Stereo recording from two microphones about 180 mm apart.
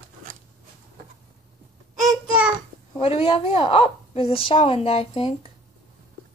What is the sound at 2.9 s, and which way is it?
A woman's voice, 30° left (ahead or behind).